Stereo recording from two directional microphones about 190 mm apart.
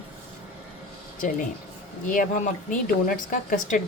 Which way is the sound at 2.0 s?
45° left (ahead or behind).